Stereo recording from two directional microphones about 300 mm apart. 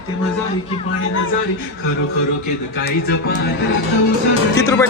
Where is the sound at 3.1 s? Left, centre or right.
Left.